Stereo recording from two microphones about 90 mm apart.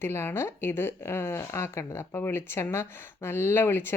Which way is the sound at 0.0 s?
25° left (ahead or behind).